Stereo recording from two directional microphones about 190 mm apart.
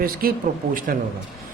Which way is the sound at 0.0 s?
50° right (ahead or behind).